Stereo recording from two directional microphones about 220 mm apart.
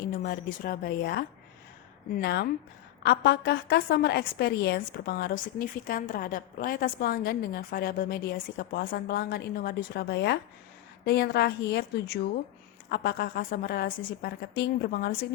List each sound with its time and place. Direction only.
0.2 s a woman's voice: 40° left (ahead or behind)